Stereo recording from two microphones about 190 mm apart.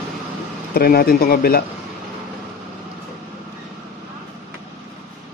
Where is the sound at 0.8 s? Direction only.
55° left (ahead or behind).